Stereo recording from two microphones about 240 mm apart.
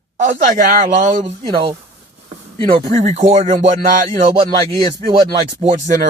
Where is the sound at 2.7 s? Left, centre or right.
Right.